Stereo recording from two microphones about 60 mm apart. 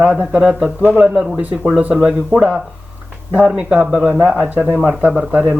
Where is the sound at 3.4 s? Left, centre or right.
Centre.